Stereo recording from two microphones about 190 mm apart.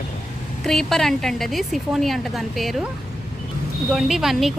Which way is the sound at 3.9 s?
Centre (ahead or behind).